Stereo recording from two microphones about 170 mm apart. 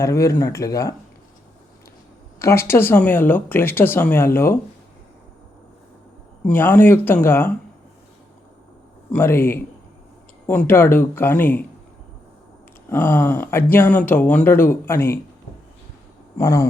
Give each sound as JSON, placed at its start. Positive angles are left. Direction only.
{"t": 0.0, "sound": "speech", "side_deg": 15}
{"t": 2.4, "sound": "speech", "side_deg": 15}
{"t": 6.5, "sound": "speech", "side_deg": 10}
{"t": 9.1, "sound": "speech", "side_deg": 15}
{"t": 12.9, "sound": "speech", "side_deg": 10}
{"t": 16.4, "sound": "speech", "side_deg": 15}